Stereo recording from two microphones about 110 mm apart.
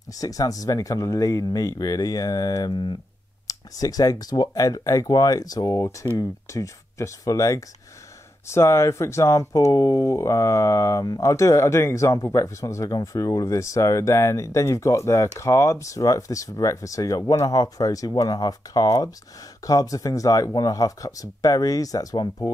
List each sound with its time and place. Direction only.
0.1 s speech: 30° left (ahead or behind)